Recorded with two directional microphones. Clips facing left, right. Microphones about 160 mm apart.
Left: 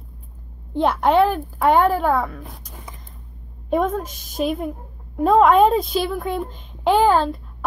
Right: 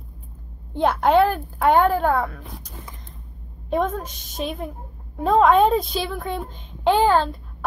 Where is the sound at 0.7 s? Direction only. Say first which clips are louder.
Left 1 dB; centre (ahead or behind).